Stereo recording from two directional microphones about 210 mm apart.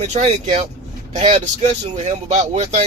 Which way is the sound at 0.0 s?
30° right (ahead or behind).